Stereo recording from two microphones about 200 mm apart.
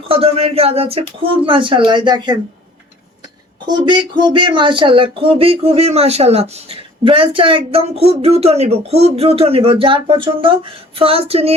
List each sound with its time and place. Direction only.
0.1 s speech: 30° right (ahead or behind)
3.7 s speech: 20° right (ahead or behind)